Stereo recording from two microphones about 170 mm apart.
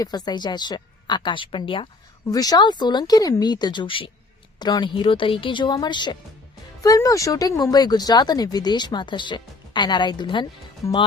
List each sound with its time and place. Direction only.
0.0 s speech: 25° left (ahead or behind)